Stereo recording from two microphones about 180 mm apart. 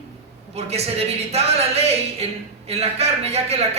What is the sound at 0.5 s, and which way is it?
A man's voice, 35° right (ahead or behind).